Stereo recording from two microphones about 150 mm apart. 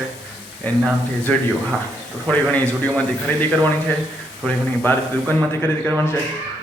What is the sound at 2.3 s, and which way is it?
Speech, 10° left (ahead or behind).